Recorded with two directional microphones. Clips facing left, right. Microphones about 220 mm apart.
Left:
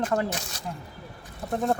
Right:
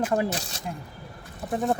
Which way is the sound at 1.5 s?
Centre (ahead or behind).